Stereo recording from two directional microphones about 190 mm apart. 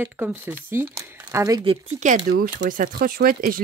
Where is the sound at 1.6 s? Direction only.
35° right (ahead or behind).